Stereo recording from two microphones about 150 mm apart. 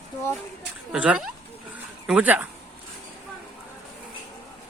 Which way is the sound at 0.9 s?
5° right (ahead or behind).